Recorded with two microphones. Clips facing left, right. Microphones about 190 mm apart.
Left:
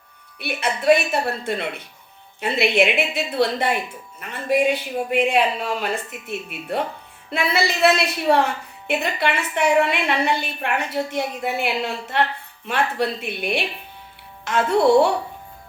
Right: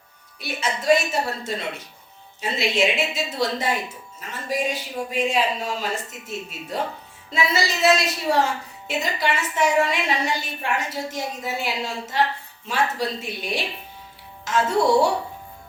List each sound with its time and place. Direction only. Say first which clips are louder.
0.3 s speech: left 3 dB; 60° left (ahead or behind)